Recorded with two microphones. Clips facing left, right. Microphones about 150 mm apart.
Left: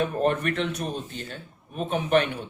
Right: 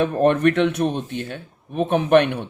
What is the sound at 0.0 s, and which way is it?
Speech, 70° right (ahead or behind).